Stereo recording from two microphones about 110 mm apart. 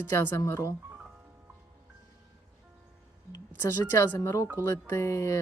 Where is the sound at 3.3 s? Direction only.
25° left (ahead or behind).